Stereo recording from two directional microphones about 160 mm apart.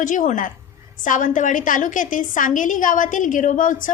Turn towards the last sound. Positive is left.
turn(degrees=55)  # may be behind; listen again after turning